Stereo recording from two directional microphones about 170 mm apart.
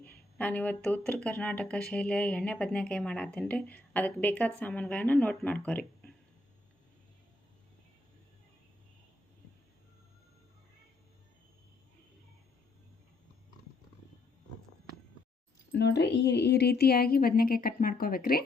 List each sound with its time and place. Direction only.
0.0 s speech: 10° left (ahead or behind)
15.7 s a woman's voice: 85° left; by 18.4 s 60° left (ahead or behind)